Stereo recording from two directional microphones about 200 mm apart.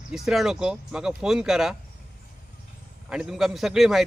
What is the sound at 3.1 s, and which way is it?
Speech, 5° right (ahead or behind).